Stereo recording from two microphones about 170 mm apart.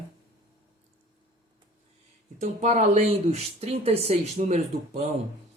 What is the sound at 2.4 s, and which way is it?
Speech, 40° right (ahead or behind).